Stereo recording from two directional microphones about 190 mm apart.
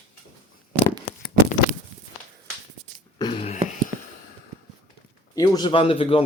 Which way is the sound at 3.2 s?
30° left (ahead or behind).